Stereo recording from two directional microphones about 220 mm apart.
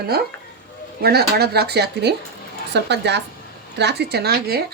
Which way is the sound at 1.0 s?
45° right (ahead or behind).